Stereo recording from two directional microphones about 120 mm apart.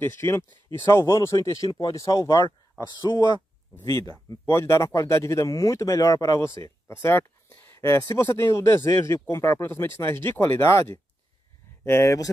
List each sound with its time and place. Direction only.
0.0 s speech: 20° left (ahead or behind); by 3.3 s 35° left (ahead or behind)
4.1 s speech: 20° left (ahead or behind)